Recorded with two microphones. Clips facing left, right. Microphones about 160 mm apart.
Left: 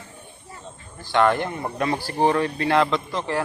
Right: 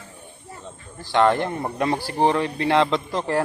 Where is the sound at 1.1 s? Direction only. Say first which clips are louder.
Right 1 dB; 30° right (ahead or behind).